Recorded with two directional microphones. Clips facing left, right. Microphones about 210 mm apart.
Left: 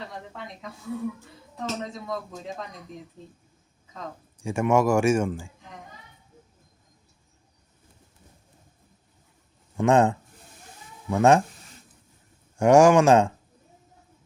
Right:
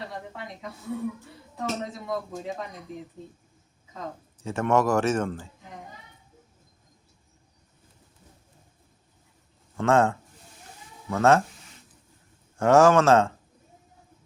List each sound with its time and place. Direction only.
1.5 s a man's voice: 5° right (ahead or behind)
4.4 s a man's voice: 10° left (ahead or behind)
9.7 s a man's voice: 15° left (ahead or behind)
12.5 s a man's voice: 15° left (ahead or behind)